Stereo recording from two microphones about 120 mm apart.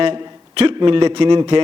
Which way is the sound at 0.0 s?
50° right (ahead or behind).